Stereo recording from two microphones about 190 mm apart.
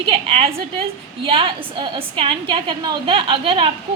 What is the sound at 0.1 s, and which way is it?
A woman's voice, 30° right (ahead or behind).